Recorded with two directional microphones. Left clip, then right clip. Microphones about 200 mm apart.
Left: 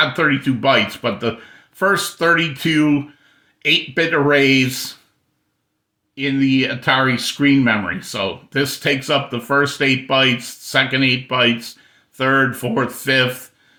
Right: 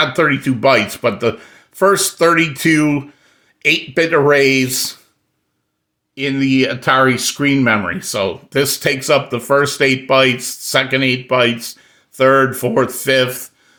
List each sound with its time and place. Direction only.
0.0 s speech: 40° right (ahead or behind)
6.1 s speech: 40° right (ahead or behind)